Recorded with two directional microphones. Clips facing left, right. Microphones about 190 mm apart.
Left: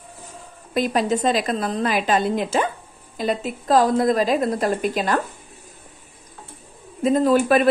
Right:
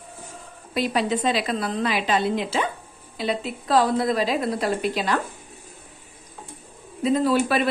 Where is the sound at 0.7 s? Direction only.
45° left (ahead or behind).